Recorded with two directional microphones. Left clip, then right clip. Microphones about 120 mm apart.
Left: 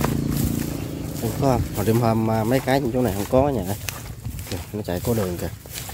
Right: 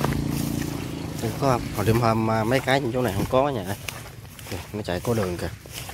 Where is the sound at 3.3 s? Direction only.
50° left (ahead or behind).